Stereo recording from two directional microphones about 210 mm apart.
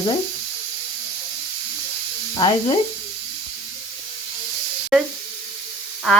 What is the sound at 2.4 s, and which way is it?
Speech, 15° left (ahead or behind).